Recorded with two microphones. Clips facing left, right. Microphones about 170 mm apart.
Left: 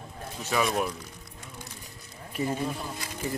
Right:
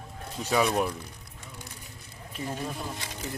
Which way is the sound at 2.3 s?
10° left (ahead or behind).